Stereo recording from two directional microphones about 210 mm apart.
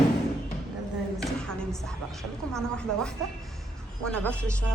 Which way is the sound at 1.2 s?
5° left (ahead or behind).